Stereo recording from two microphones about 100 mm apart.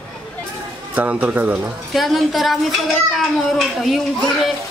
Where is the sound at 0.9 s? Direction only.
15° right (ahead or behind).